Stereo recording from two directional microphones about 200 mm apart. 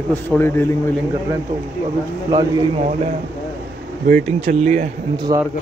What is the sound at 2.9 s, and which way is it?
Speech, 40° right (ahead or behind).